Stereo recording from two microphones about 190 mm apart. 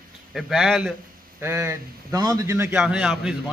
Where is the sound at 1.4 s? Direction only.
15° right (ahead or behind).